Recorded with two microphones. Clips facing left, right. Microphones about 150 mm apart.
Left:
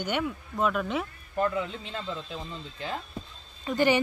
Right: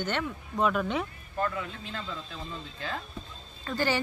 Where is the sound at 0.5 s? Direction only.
Centre (ahead or behind).